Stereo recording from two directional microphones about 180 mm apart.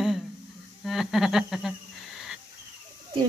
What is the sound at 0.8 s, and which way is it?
Owl, centre (ahead or behind).